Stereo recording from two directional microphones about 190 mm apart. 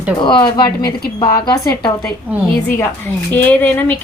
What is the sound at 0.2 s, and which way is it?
Speech, 25° left (ahead or behind).